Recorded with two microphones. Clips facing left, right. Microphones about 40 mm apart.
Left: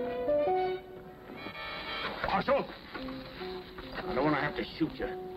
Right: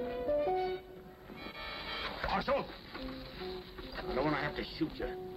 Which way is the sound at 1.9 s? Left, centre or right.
Centre.